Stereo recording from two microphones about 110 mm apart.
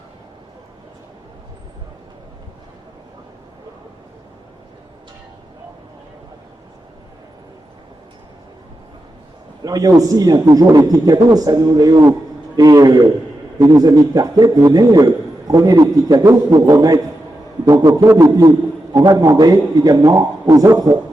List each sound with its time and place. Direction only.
9.6 s a man's voice: 35° right (ahead or behind)